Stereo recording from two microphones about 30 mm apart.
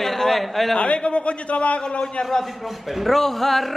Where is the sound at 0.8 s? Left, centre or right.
Left.